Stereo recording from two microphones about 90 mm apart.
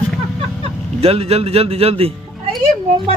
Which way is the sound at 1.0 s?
90° right.